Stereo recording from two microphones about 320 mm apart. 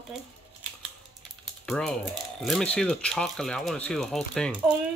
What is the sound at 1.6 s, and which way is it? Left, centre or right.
Speech, centre.